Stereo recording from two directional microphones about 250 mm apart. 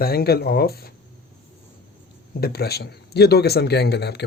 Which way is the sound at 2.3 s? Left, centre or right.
Left.